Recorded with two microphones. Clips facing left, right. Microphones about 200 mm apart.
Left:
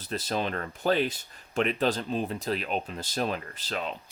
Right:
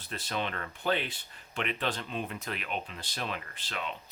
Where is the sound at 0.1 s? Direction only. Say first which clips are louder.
Left 5 dB; 40° left (ahead or behind).